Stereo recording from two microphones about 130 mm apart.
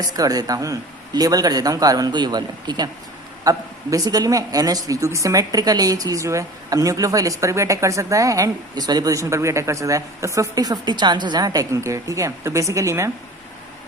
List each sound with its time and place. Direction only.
0.1 s a woman's voice: 30° right (ahead or behind)